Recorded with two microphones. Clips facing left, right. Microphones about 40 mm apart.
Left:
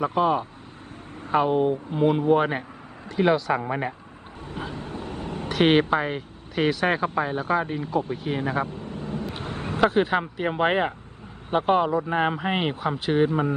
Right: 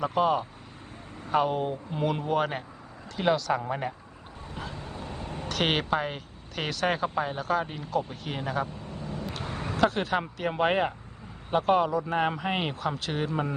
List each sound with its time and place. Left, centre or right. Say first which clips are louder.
0.0 s speech: left 3 dB; centre
3.6 s speech: left 4 dB; left
4.6 s vehicle: left 5 dB; left
5.5 s speech: left 7 dB; centre
7.0 s speech: left 4 dB; left
7.3 s speech: left 4 dB; left
9.4 s a sound: left 3 dB; left
9.7 s speech: left 5 dB; left